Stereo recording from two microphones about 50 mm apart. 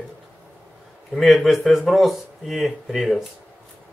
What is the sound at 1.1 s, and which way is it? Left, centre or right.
Speech, centre.